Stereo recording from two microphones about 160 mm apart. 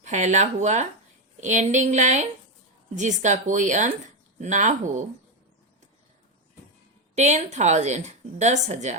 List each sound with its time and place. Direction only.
0.0 s a woman's voice: 50° right (ahead or behind)
7.2 s a woman's voice: 45° right (ahead or behind)